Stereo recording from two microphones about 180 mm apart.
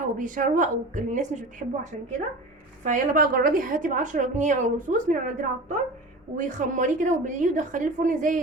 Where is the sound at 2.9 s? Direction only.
50° right (ahead or behind).